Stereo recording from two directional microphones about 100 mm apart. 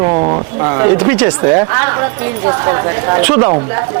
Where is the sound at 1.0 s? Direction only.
15° right (ahead or behind).